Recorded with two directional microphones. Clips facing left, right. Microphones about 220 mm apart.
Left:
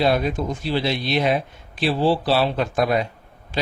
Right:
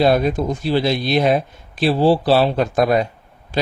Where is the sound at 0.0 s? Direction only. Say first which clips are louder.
Right 4 dB; 40° right (ahead or behind).